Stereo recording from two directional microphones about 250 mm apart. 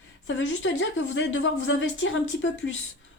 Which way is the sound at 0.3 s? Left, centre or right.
Left.